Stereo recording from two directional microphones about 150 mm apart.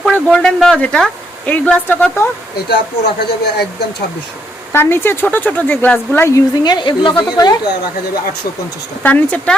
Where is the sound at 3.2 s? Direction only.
90° left.